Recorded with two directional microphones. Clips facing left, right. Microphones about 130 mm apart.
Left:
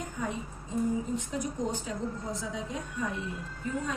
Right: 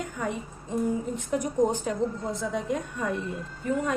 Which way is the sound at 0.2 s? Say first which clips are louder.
Right 1 dB; 65° right (ahead or behind).